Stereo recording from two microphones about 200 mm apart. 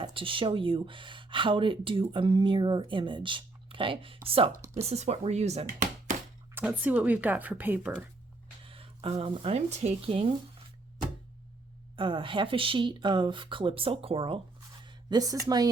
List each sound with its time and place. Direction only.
0.0 s speech: 25° right (ahead or behind)
6.5 s speech: 10° right (ahead or behind)
8.6 s speech: 25° right (ahead or behind)
11.9 s speech: 25° right (ahead or behind)